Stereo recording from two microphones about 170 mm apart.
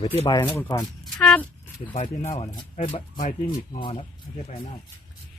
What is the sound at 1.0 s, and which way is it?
Speech, 5° left (ahead or behind).